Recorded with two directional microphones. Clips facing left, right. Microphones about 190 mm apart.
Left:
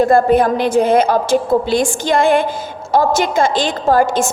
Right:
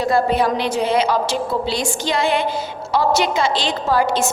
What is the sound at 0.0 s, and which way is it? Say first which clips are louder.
A woman's voice: left 6 dB; 50° left (ahead or behind).